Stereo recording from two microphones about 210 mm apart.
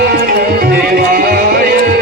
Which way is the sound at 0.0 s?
45° right (ahead or behind).